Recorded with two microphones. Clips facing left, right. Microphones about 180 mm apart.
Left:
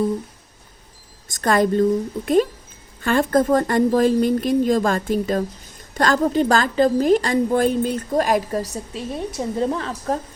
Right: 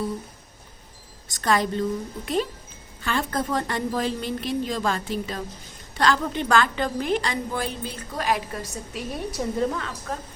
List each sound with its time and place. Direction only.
1.3 s a woman's voice: 50° left (ahead or behind)
8.7 s a woman's voice: 30° left (ahead or behind)